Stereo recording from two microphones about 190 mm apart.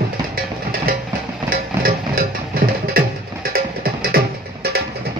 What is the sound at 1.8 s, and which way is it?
Music, 50° right (ahead or behind).